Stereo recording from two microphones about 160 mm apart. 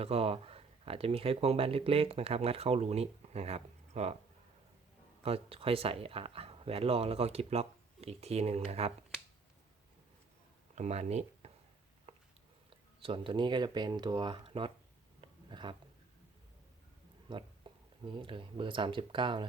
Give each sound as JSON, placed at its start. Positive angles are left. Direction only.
{"t": 0.0, "sound": "speech", "side_deg": -40}
{"t": 5.2, "sound": "speech", "side_deg": -35}
{"t": 10.8, "sound": "speech", "side_deg": -45}
{"t": 12.1, "sound": "a sound", "side_deg": -40}
{"t": 12.7, "sound": "speech", "side_deg": -35}
{"t": 15.2, "sound": "a sound", "side_deg": -30}
{"t": 17.2, "sound": "speech", "side_deg": -30}